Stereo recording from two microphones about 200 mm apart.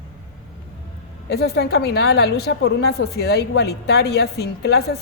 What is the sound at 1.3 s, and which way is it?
A woman's voice, 55° left (ahead or behind).